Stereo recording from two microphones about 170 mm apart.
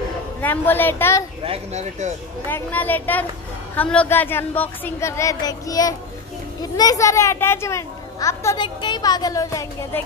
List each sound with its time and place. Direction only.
0.4 s a woman's voice: 10° left (ahead or behind)
1.4 s speech: 40° right (ahead or behind)
2.4 s a woman's voice: 10° left (ahead or behind)